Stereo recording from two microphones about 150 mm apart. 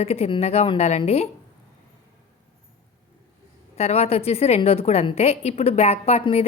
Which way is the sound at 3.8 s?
45° left (ahead or behind).